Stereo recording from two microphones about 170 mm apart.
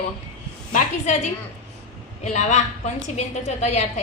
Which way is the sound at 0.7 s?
45° left (ahead or behind).